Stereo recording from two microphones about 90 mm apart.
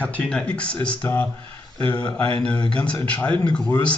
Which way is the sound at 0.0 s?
15° left (ahead or behind).